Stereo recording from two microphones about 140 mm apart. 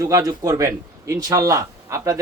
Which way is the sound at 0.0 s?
25° right (ahead or behind).